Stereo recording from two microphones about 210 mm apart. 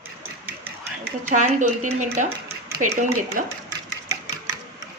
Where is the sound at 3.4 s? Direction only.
40° right (ahead or behind).